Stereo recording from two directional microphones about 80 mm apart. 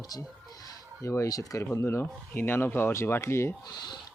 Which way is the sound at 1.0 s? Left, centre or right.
Left.